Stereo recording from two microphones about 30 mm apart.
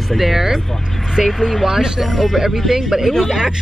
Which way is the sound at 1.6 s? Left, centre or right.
Centre.